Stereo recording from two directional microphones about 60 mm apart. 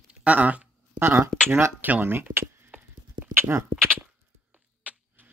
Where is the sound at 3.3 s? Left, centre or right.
Right.